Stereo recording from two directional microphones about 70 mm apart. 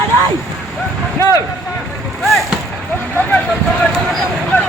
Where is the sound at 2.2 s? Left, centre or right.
Centre.